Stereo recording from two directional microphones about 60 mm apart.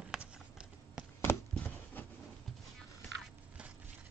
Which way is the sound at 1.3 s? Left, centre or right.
Left.